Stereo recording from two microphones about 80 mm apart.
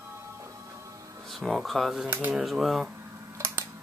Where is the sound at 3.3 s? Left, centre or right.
Right.